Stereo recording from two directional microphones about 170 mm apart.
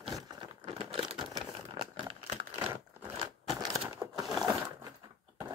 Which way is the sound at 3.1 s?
25° right (ahead or behind).